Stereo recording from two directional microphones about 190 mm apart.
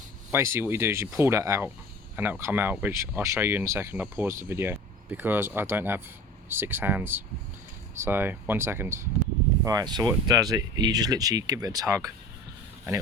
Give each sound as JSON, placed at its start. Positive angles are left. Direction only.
{"t": 0.3, "sound": "speech", "side_deg": -15}